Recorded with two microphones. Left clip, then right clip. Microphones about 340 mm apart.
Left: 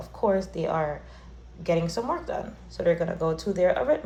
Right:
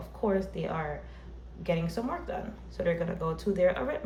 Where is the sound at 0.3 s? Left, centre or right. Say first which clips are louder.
Left 5 dB; centre.